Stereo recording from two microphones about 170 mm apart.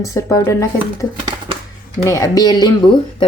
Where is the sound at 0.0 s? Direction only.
20° left (ahead or behind).